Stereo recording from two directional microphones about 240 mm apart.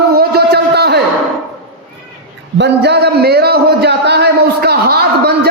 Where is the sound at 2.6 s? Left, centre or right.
Right.